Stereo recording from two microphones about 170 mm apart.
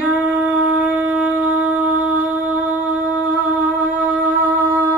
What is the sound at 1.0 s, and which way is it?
Shofar, 10° right (ahead or behind).